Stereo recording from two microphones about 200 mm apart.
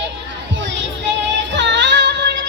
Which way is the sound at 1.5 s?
65° right (ahead or behind).